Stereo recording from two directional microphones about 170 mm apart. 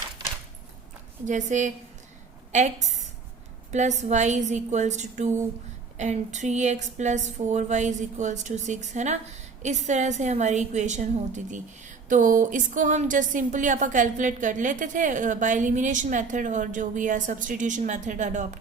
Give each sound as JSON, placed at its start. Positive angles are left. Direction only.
{"t": 1.2, "sound": "a woman's voice", "side_deg": -45}